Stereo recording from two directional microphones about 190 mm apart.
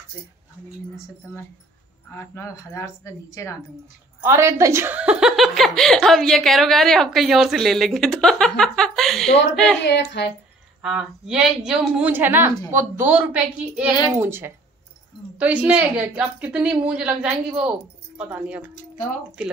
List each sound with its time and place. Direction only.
2.0 s a woman's voice: 15° left (ahead or behind)
4.2 s a woman's voice: 15° right (ahead or behind); by 9.3 s centre (ahead or behind)
9.8 s speech: 65° left (ahead or behind)
10.8 s a woman's voice: 5° right (ahead or behind)